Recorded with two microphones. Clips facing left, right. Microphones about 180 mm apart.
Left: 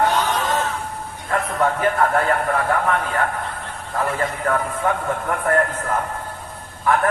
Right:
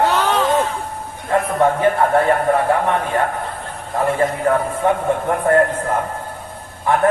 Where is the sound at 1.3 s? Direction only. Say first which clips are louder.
Right 5 dB; 30° right (ahead or behind).